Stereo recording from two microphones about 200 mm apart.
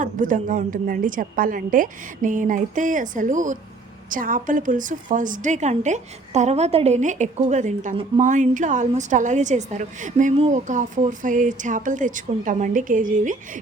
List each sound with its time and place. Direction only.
0.0 s a woman's voice: 40° right (ahead or behind)